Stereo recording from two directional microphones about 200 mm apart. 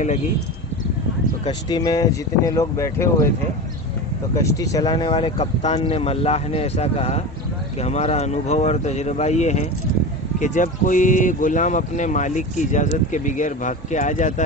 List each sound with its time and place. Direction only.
1.4 s speech: 20° left (ahead or behind)
4.4 s speech: 15° left (ahead or behind); by 14.4 s 40° left (ahead or behind)